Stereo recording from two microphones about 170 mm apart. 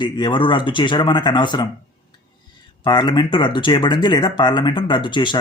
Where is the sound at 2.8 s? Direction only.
25° left (ahead or behind).